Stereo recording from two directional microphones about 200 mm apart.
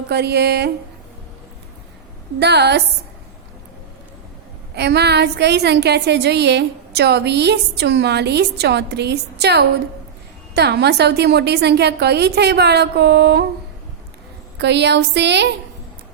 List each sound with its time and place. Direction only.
0.1 s a woman's voice: 55° right (ahead or behind)
2.4 s a woman's voice: 55° right (ahead or behind)
4.7 s a woman's voice: 55° right (ahead or behind)
14.6 s a woman's voice: 60° right (ahead or behind)